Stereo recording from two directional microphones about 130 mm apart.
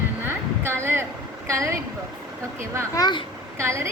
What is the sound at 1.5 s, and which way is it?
Speech, 25° right (ahead or behind).